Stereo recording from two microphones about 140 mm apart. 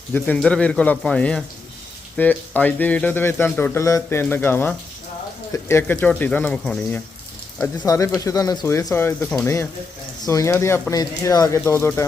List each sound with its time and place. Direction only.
0.1 s a man's voice: 10° left (ahead or behind)
7.8 s a man's voice: 25° left (ahead or behind)